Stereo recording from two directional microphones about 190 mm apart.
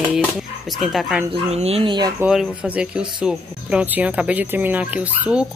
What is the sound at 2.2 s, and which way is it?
Speech, 5° right (ahead or behind).